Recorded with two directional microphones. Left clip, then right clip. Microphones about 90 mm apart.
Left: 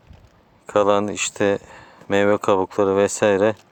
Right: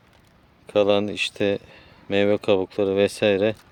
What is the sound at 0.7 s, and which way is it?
Speech, 25° right (ahead or behind).